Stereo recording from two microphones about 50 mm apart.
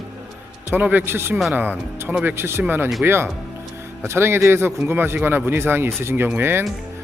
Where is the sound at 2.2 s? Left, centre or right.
Right.